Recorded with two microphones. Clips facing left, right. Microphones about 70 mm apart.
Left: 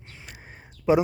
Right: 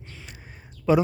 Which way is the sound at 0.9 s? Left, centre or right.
Centre.